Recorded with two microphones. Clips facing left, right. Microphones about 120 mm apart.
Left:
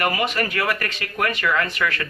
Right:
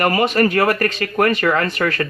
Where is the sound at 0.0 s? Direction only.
40° right (ahead or behind).